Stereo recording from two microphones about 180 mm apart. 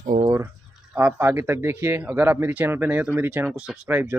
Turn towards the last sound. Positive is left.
turn(degrees=-10)  # may be behind; listen again after turning